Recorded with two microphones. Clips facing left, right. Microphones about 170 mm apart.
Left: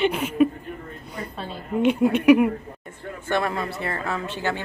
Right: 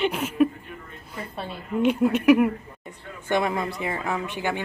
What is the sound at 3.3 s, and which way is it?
Speech, 15° right (ahead or behind).